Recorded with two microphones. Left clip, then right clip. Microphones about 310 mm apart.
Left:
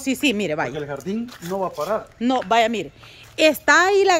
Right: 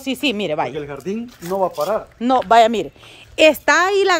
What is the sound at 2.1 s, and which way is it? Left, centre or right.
Speech, centre.